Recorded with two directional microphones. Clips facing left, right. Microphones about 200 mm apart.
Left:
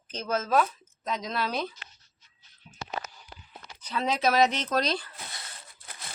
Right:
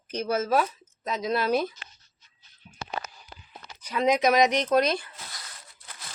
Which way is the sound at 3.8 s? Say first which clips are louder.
Right 6 dB; 10° right (ahead or behind).